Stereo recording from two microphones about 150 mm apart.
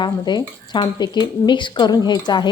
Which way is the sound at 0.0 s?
30° left (ahead or behind).